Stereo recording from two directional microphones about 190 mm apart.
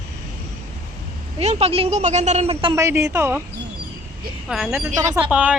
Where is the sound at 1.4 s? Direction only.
35° right (ahead or behind).